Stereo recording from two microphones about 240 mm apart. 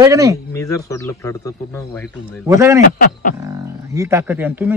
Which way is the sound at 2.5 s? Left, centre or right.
Centre.